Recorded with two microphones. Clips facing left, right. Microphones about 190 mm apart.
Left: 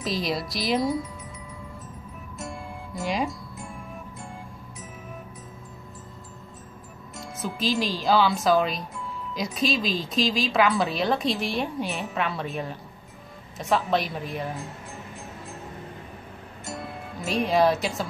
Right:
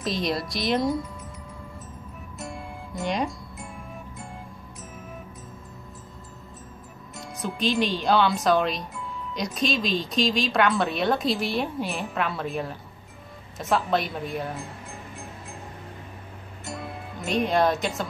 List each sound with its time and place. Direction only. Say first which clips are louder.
0.0 s speech: right 1 dB; centre (ahead or behind)
2.3 s music: even; centre (ahead or behind)
7.2 s speech: right 1 dB; centre (ahead or behind)
16.6 s music: even; centre (ahead or behind)